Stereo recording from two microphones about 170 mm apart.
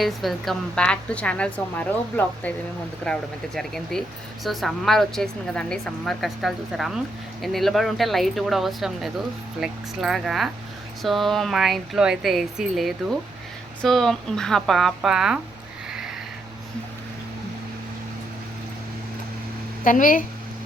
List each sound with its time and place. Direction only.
0.0 s a woman's voice: centre (ahead or behind)
19.8 s speech: 50° left (ahead or behind)